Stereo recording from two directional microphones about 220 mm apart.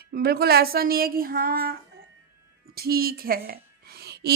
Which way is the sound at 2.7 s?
45° right (ahead or behind).